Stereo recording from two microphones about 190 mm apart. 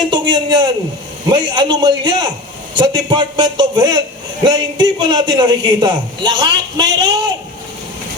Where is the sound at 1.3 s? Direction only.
25° right (ahead or behind).